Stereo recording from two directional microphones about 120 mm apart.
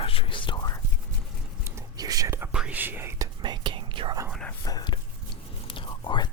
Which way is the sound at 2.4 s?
10° right (ahead or behind).